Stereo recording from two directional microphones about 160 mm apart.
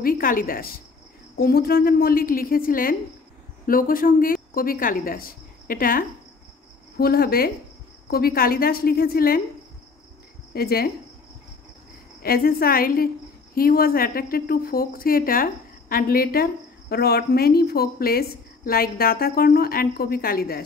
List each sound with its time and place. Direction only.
0.0 s a woman's voice: 60° left (ahead or behind)
10.5 s speech: 75° left (ahead or behind)
12.2 s a woman's voice: 70° left (ahead or behind)
16.9 s a woman's voice: 80° left